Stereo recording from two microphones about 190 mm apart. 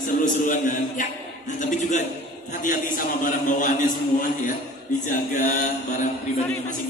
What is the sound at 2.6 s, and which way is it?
Music, 45° left (ahead or behind).